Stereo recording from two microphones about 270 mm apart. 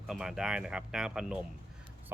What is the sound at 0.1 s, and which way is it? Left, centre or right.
Speech, centre.